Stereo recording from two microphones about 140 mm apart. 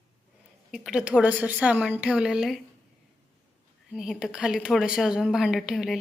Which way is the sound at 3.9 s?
5° right (ahead or behind).